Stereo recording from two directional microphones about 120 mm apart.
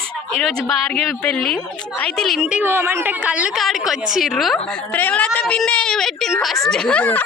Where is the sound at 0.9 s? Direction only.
5° left (ahead or behind).